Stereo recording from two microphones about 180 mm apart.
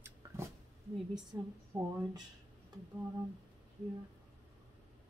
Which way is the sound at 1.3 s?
15° right (ahead or behind).